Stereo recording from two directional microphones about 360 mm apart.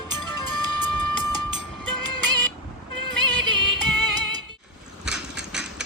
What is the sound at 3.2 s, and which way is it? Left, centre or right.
Music, right.